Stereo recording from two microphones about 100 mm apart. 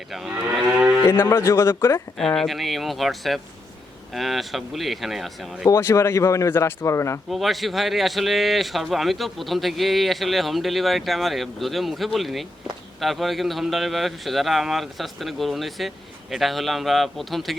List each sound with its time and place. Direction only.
1.0 s speech: 20° left (ahead or behind)
2.1 s a man's voice: 5° left (ahead or behind)
5.6 s speech: 30° left (ahead or behind)
7.3 s a man's voice: centre (ahead or behind)